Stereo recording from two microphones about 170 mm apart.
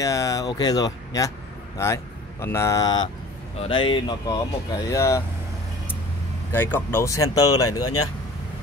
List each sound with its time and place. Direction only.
0.0 s speech: 20° left (ahead or behind)
2.4 s speech: 15° left (ahead or behind)
6.5 s speech: 10° left (ahead or behind)